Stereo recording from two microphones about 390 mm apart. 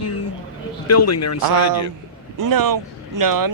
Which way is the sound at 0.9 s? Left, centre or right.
Left.